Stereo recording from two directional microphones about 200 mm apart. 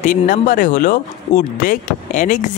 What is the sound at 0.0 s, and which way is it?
Speech, 40° left (ahead or behind).